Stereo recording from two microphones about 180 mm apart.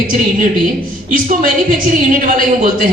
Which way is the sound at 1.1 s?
50° right (ahead or behind).